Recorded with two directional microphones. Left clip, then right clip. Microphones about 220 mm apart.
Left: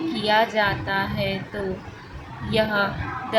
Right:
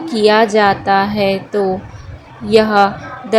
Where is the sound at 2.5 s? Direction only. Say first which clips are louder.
Right 11 dB; 35° right (ahead or behind).